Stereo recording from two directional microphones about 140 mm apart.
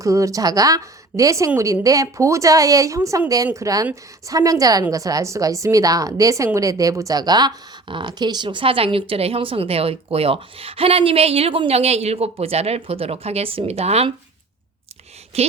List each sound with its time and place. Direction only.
0.0 s a woman's voice: 25° right (ahead or behind); by 14.1 s 50° right (ahead or behind)
15.3 s a woman's voice: 50° right (ahead or behind)